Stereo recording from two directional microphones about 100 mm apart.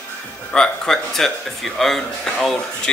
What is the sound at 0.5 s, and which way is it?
Speech, 10° left (ahead or behind).